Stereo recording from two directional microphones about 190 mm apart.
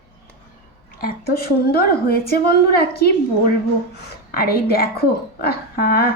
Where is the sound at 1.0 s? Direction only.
55° left (ahead or behind).